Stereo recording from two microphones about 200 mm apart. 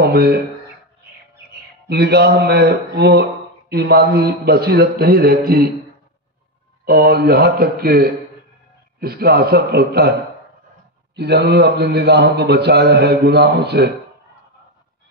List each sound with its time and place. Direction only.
0.0 s speech: 50° right (ahead or behind)
1.9 s speech: 55° right (ahead or behind)
6.8 s speech: 50° right (ahead or behind)
11.1 s a man's voice: 55° right (ahead or behind)